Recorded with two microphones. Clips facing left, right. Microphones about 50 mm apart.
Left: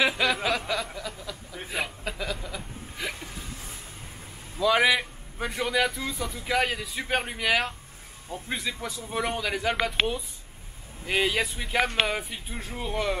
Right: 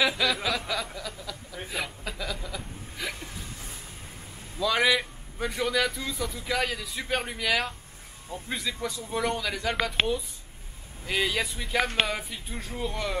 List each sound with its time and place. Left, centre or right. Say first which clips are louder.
0.0 s a sound: left 1 dB; centre
4.6 s a man's voice: left 2 dB; centre
11.1 s a man's voice: left 2 dB; centre